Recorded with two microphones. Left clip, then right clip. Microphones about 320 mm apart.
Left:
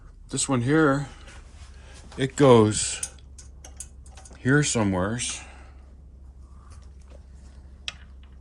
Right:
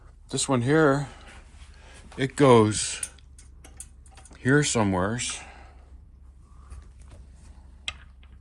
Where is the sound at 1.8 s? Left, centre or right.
Centre.